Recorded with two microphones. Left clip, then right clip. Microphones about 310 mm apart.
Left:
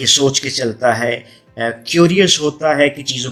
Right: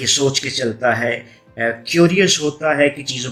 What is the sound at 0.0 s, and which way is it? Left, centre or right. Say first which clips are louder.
Speech: left 4 dB; left.